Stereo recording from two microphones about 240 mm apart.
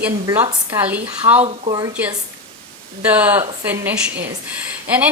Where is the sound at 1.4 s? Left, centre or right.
Right.